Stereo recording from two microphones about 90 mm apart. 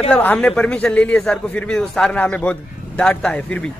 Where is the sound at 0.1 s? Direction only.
15° left (ahead or behind).